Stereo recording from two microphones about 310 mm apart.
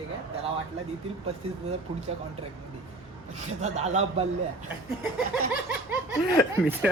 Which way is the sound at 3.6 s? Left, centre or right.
Right.